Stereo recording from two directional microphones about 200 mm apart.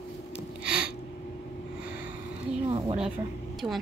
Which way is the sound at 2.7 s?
30° right (ahead or behind).